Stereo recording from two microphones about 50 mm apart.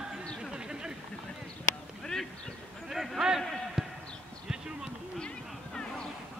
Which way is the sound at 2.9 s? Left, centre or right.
Centre.